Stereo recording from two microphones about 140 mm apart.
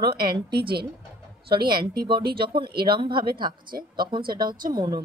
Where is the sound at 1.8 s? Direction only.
90° right.